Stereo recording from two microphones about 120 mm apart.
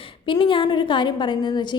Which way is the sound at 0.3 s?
45° left (ahead or behind).